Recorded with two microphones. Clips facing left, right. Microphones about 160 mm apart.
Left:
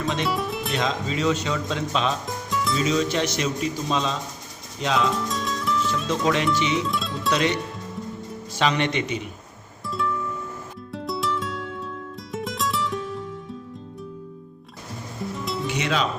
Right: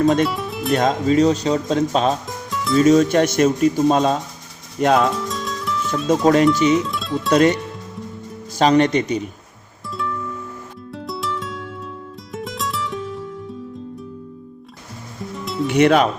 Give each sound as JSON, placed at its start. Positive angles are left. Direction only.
{"t": 0.3, "sound": "music", "side_deg": 0}
{"t": 0.7, "sound": "speech", "side_deg": -50}
{"t": 2.2, "sound": "music", "side_deg": 0}
{"t": 2.7, "sound": "speech", "side_deg": -50}
{"t": 5.1, "sound": "music", "side_deg": 0}
{"t": 6.1, "sound": "speech", "side_deg": -45}
{"t": 6.7, "sound": "speech", "side_deg": 0}
{"t": 7.3, "sound": "speech", "side_deg": -45}
{"t": 9.9, "sound": "music", "side_deg": 0}
{"t": 15.6, "sound": "speech", "side_deg": -55}